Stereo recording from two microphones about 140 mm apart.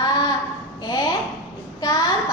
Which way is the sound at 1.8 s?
30° left (ahead or behind).